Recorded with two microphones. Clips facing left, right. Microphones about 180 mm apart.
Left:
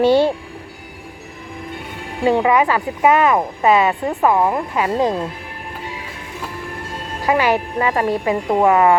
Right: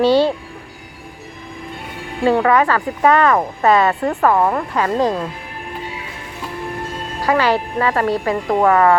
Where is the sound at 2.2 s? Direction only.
15° left (ahead or behind).